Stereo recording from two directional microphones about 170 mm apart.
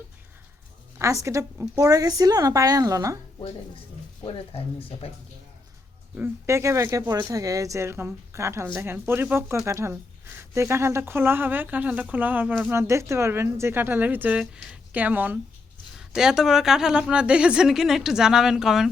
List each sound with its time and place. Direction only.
0.9 s a woman's voice: 15° right (ahead or behind)
4.3 s speech: 35° left (ahead or behind)
6.1 s speech: 15° right (ahead or behind)